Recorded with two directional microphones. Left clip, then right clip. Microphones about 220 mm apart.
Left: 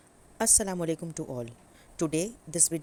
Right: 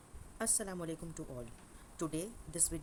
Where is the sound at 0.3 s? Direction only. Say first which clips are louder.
Left 12 dB; 35° left (ahead or behind).